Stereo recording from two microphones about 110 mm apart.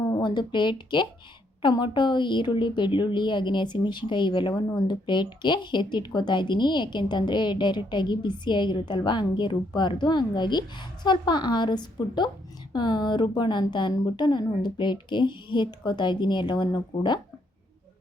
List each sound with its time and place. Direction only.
0.2 s a woman's voice: 45° left (ahead or behind)